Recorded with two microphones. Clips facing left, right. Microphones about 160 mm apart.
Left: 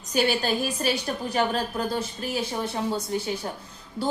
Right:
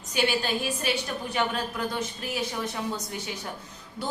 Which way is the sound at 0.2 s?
40° left (ahead or behind).